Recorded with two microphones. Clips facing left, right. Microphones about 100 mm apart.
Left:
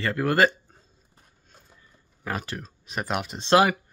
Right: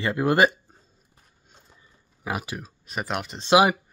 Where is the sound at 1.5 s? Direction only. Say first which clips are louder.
Even; 15° right (ahead or behind); by 3.5 s centre (ahead or behind).